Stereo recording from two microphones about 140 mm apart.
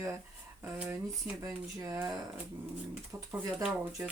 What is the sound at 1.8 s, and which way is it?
Speech, 20° right (ahead or behind).